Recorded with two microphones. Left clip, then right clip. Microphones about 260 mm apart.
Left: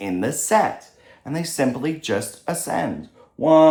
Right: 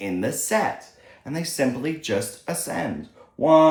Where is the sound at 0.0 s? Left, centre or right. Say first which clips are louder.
Left 2 dB; centre.